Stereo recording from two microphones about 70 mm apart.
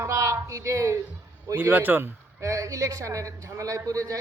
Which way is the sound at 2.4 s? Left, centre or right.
Right.